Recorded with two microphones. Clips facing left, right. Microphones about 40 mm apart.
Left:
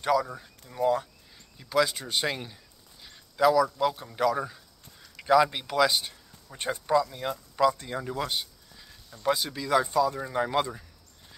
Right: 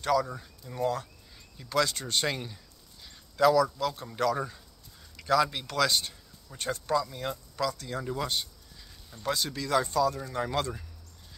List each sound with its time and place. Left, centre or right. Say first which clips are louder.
0.0 s speech: left 1 dB; centre
5.1 s speech: left 4 dB; centre
7.6 s speech: left 7 dB; left
8.0 s speech: right 1 dB; centre